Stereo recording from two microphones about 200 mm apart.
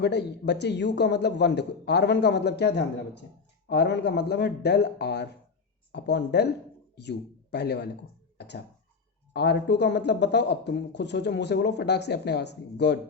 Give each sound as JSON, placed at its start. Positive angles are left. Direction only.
{"t": 0.0, "sound": "speech", "side_deg": 60}
{"t": 8.4, "sound": "a sound", "side_deg": 55}
{"t": 9.3, "sound": "speech", "side_deg": 55}